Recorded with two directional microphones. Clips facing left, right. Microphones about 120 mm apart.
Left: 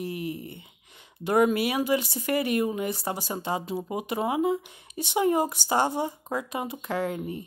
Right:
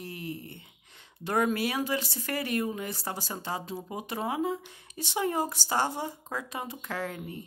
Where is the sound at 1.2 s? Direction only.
15° left (ahead or behind).